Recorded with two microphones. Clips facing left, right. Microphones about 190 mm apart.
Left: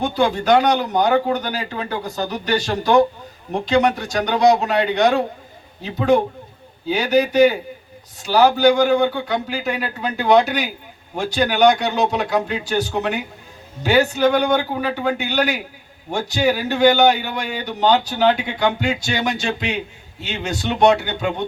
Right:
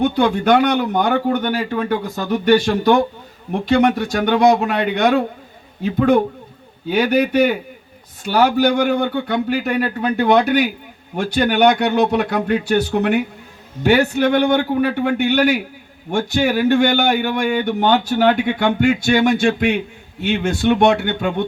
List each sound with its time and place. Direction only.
0.0 s a woman's voice: 60° right (ahead or behind)